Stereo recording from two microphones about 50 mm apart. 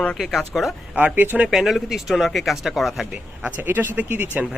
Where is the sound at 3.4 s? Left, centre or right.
Right.